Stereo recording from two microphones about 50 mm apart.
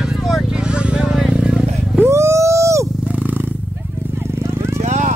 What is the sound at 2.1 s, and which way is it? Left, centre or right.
Dog, right.